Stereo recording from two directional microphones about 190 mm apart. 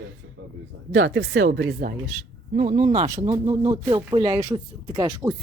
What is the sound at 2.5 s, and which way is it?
Speech, 35° right (ahead or behind).